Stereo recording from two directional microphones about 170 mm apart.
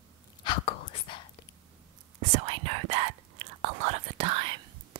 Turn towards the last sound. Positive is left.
turn(degrees=-30)  # may be behind; listen again after turning